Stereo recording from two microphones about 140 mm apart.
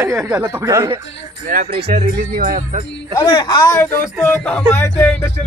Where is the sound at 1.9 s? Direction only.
85° right.